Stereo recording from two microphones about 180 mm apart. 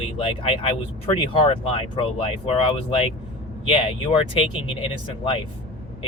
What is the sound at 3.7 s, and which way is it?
Speech, 30° left (ahead or behind).